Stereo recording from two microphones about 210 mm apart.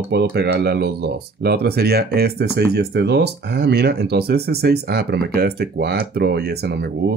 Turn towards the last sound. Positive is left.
turn(degrees=-50)  # may be behind; listen again after turning